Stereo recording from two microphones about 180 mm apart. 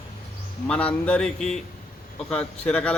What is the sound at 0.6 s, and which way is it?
A man's voice, 5° left (ahead or behind).